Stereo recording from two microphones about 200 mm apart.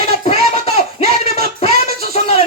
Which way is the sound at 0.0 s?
30° left (ahead or behind).